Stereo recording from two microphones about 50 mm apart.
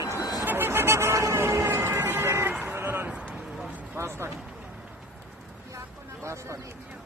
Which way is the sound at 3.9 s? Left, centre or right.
Right.